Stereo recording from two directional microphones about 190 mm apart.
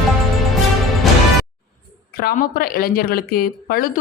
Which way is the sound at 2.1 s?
50° left (ahead or behind).